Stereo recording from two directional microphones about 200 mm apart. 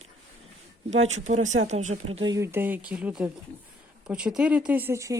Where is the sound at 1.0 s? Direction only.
35° right (ahead or behind).